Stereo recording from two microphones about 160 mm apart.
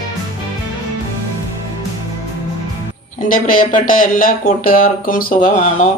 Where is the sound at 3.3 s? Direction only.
60° left (ahead or behind).